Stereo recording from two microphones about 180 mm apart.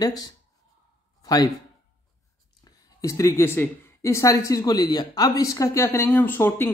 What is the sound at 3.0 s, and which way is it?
Speech, 15° left (ahead or behind).